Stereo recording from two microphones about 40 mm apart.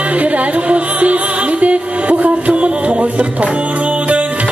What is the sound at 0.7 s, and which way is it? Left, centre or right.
Music, right.